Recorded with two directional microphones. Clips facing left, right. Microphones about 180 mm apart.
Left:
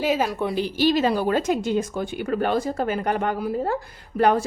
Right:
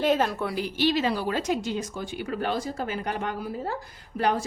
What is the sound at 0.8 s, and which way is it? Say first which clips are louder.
A woman's voice: left 4 dB; 45° left (ahead or behind).